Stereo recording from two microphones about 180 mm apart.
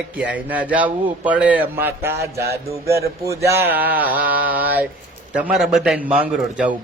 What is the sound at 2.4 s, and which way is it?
Music, 60° right (ahead or behind).